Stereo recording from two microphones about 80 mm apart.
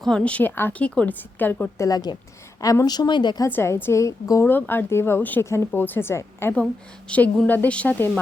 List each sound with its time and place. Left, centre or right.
0.0 s a woman's voice: centre
1.8 s a woman's voice: left
3.5 s a woman's voice: left
4.4 s a woman's voice: left
7.1 s a woman's voice: centre